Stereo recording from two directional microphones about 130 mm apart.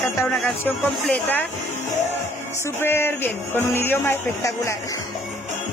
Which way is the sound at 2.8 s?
15° left (ahead or behind).